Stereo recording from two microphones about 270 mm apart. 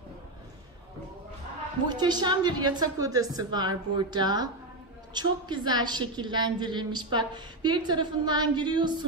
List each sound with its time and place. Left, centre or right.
1.9 s a woman's voice: centre